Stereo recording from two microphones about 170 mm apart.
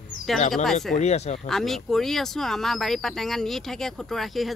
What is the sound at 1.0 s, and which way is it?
Speech, 40° left (ahead or behind).